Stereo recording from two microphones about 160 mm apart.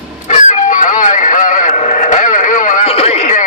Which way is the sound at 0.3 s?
50° left (ahead or behind).